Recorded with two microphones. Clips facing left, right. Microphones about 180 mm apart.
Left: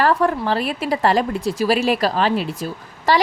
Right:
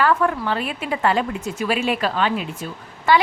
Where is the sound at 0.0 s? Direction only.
35° left (ahead or behind).